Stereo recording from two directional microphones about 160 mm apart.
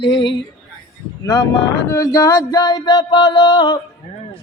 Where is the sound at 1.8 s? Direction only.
20° left (ahead or behind).